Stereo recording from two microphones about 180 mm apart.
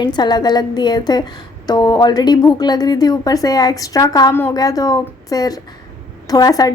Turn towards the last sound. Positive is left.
turn(degrees=20)  # may be behind; listen again after turning